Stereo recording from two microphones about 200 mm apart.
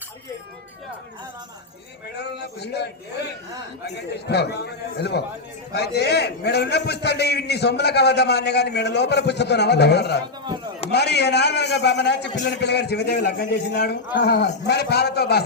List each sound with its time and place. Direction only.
2.1 s a man's voice: 55° left (ahead or behind)